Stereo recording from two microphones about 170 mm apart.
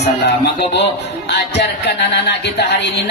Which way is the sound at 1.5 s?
85° left.